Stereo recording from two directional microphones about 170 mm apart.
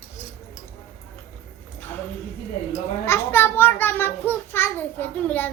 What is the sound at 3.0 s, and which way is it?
A child's voice, 15° left (ahead or behind).